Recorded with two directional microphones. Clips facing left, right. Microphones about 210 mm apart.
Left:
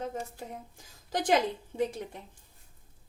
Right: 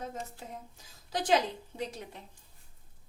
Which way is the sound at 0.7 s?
50° left (ahead or behind).